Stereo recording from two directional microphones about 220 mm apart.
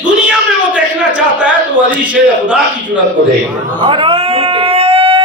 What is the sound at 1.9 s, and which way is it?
Speech, 5° right (ahead or behind).